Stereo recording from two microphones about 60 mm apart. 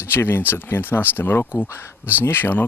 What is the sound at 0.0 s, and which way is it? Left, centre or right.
Speech, left.